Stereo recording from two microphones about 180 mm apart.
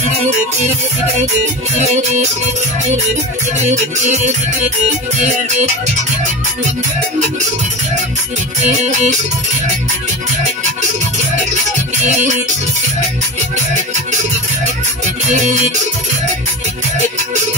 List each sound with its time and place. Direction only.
1.8 s music: 40° right (ahead or behind)
3.7 s music: 40° right (ahead or behind)
8.6 s music: 40° right (ahead or behind)